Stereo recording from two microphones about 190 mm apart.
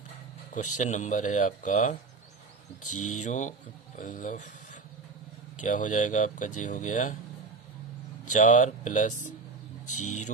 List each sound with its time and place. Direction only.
0.5 s speech: 40° left (ahead or behind)
8.2 s speech: 40° left (ahead or behind)